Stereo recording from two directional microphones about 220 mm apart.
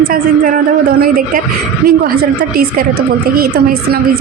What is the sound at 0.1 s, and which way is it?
Speech, 40° right (ahead or behind).